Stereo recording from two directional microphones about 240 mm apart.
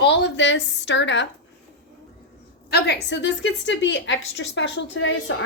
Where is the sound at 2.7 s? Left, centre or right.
Left.